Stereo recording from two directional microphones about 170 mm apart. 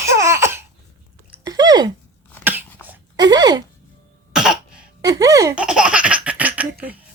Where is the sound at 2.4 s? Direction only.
10° right (ahead or behind).